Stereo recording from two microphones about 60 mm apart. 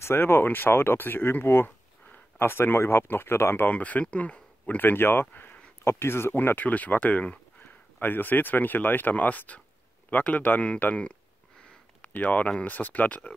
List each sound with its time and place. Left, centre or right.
0.0 s speech: left
5.9 s speech: left
12.0 s a sound: left
12.6 s speech: left